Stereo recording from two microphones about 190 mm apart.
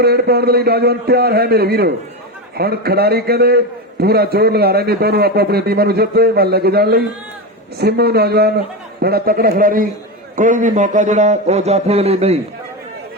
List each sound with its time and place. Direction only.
0.0 s a man's voice: 55° right (ahead or behind); by 12.4 s 35° right (ahead or behind)